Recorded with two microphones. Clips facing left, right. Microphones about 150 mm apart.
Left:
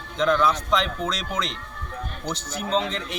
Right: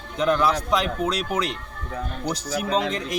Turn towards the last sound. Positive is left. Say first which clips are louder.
# right 2 dB
turn(degrees=-10)  # may be behind; listen again after turning